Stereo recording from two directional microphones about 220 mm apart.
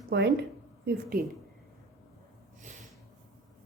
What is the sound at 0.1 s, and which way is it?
Speech, 50° right (ahead or behind).